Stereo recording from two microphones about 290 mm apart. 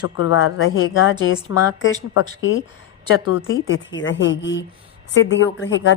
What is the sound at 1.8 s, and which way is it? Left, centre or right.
Speech, left.